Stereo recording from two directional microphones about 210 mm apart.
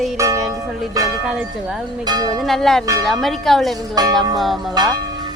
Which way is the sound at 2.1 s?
20° right (ahead or behind).